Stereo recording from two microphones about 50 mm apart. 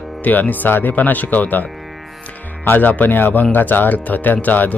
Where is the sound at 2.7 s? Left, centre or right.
Left.